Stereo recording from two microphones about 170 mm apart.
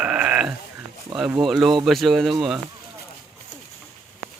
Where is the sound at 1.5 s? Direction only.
Centre (ahead or behind).